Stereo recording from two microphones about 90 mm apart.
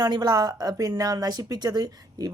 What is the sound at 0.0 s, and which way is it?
Speech, 50° right (ahead or behind).